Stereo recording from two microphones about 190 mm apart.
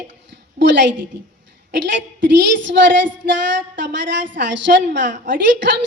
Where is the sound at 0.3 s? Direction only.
70° right (ahead or behind).